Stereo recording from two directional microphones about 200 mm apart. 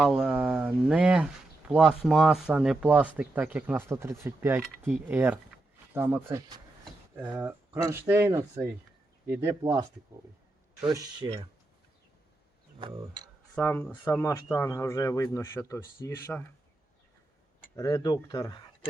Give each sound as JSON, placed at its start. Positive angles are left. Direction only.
{"t": 0.0, "sound": "speech", "side_deg": -5}
{"t": 10.9, "sound": "speech", "side_deg": -20}
{"t": 12.8, "sound": "speech", "side_deg": -20}
{"t": 13.6, "sound": "speech", "side_deg": 10}
{"t": 17.7, "sound": "speech", "side_deg": 15}